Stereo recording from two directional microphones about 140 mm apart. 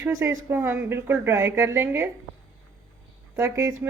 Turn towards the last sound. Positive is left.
turn(degrees=-20)  # may be behind; listen again after turning